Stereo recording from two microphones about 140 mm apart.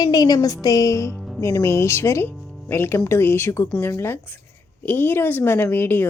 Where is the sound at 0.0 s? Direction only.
30° left (ahead or behind).